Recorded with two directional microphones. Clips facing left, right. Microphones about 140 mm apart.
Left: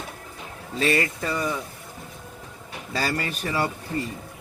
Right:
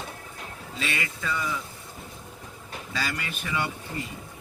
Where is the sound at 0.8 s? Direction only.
40° left (ahead or behind).